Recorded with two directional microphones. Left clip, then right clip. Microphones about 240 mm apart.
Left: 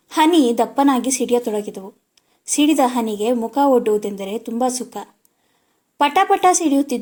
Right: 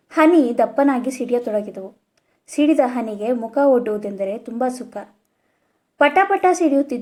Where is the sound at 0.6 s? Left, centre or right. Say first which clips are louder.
Even; left.